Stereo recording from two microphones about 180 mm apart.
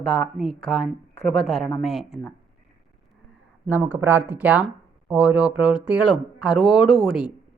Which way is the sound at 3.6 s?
10° right (ahead or behind).